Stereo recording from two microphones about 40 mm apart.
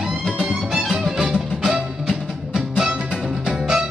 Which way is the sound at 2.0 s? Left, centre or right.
Centre.